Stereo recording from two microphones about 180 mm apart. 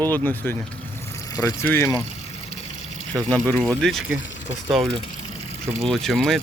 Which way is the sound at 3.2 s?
5° left (ahead or behind).